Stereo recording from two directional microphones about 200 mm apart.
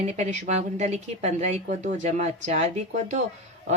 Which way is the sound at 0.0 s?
35° right (ahead or behind).